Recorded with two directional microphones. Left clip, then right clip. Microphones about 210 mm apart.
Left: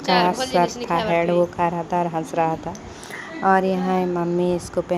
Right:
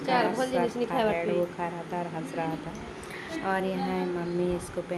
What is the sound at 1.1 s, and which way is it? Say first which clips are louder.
A woman's voice: left 9 dB; 40° left (ahead or behind).